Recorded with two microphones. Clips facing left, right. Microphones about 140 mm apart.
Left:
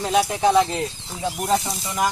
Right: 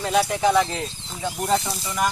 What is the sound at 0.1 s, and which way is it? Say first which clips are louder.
Speech: left 1 dB; 15° left (ahead or behind).